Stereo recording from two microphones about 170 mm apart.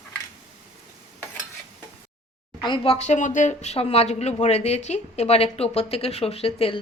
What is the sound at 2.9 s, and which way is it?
Speech, 45° left (ahead or behind).